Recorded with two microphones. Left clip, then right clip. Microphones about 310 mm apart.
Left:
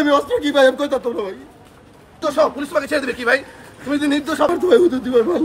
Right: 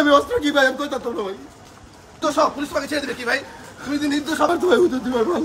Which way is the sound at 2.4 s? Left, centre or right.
Centre.